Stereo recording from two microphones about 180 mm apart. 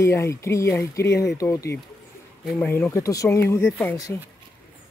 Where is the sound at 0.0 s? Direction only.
15° left (ahead or behind).